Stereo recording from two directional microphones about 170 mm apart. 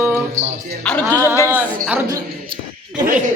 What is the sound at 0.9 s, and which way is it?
Music, 10° left (ahead or behind).